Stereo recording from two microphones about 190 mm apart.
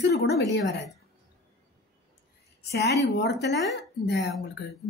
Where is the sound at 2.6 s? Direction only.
60° left (ahead or behind).